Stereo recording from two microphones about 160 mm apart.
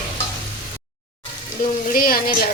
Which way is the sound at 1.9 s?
65° left (ahead or behind).